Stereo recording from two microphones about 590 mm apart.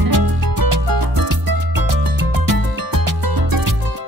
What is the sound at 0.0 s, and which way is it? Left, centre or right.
Music, right.